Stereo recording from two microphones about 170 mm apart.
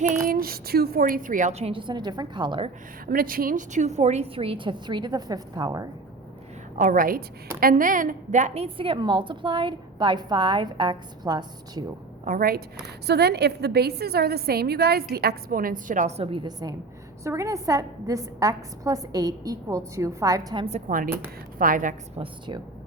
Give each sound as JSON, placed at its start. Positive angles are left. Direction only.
{"t": 0.1, "sound": "a woman's voice", "side_deg": -55}
{"t": 3.1, "sound": "a woman's voice", "side_deg": -60}
{"t": 6.7, "sound": "a woman's voice", "side_deg": -50}
{"t": 12.2, "sound": "a woman's voice", "side_deg": -55}
{"t": 20.7, "sound": "a woman's voice", "side_deg": -40}
{"t": 22.2, "sound": "a woman's voice", "side_deg": -25}